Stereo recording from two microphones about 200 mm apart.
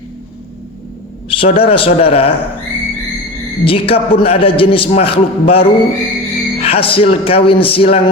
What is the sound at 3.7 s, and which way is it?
Speech, 25° left (ahead or behind).